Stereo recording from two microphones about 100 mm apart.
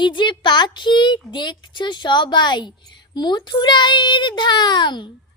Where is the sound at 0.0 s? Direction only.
50° left (ahead or behind).